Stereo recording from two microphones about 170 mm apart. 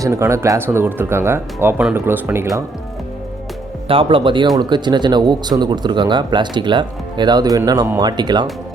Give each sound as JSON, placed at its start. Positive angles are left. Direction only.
{"t": 0.0, "sound": "speech", "side_deg": -15}
{"t": 3.8, "sound": "speech", "side_deg": -30}